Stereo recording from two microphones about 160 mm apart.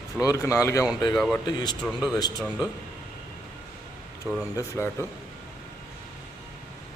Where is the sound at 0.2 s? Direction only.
20° left (ahead or behind).